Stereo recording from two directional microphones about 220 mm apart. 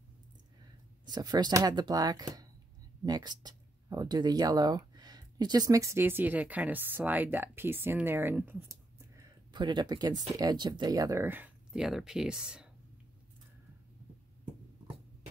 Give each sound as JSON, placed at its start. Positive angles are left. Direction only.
{"t": 1.0, "sound": "speech", "side_deg": -20}